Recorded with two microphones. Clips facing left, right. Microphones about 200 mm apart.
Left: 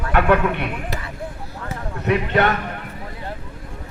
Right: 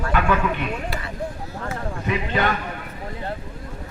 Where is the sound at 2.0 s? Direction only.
65° left (ahead or behind).